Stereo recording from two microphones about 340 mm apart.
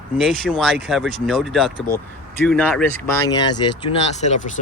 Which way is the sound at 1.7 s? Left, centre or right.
Left.